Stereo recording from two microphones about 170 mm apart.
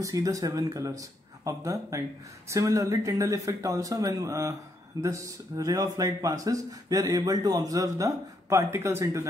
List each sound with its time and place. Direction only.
0.0 s speech: 20° right (ahead or behind)